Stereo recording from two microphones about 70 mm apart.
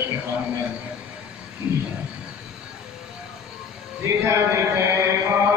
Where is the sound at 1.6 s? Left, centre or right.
Centre.